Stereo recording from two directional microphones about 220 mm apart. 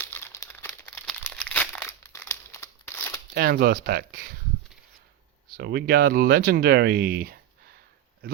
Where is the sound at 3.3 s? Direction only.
45° right (ahead or behind).